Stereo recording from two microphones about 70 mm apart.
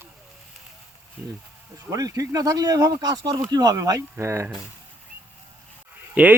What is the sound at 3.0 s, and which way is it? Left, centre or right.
Speech, right.